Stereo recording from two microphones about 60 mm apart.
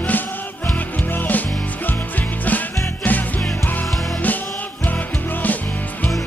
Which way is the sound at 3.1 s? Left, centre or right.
Left.